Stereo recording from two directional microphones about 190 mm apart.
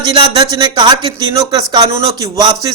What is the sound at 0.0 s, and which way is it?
A man's voice, 25° right (ahead or behind).